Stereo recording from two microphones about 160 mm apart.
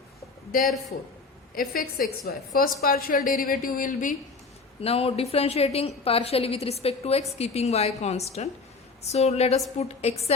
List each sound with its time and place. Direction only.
0.9 s a man's voice: 80° left
1.6 s a woman's voice: 70° left (ahead or behind)
4.8 s a woman's voice: 40° left (ahead or behind)